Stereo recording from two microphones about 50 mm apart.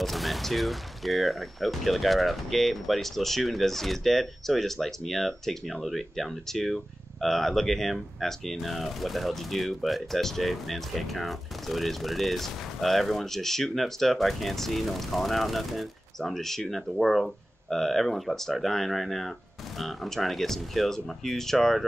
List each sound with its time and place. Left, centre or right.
0.0 s speech: centre